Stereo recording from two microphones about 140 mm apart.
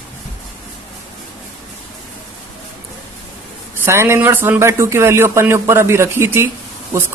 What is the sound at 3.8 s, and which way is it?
Speech, 20° right (ahead or behind).